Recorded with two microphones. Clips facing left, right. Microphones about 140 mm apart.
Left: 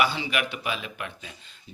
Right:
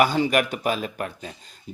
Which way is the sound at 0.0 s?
45° right (ahead or behind).